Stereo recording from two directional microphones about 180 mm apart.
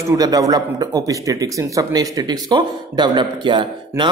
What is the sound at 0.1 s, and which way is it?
Speech, 20° right (ahead or behind).